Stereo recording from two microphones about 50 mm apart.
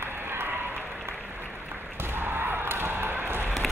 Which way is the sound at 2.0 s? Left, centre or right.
Right.